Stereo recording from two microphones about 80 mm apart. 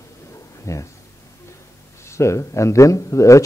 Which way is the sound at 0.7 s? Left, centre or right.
Left.